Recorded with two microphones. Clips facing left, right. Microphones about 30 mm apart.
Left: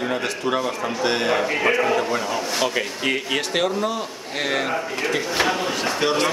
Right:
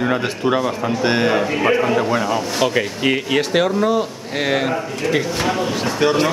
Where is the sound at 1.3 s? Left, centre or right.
Centre.